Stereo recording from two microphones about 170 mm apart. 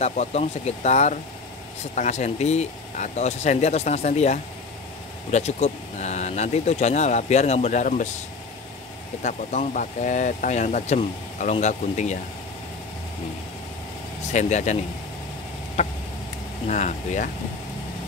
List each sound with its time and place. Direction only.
0.0 s speech: 40° left (ahead or behind)
9.2 s speech: 45° left (ahead or behind)
14.3 s speech: 45° left (ahead or behind)
15.8 s speech: 40° left (ahead or behind)